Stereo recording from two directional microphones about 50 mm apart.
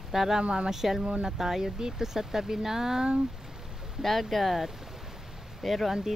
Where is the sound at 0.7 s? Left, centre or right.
Centre.